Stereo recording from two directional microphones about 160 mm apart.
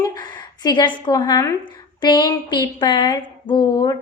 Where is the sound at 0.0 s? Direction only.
25° left (ahead or behind).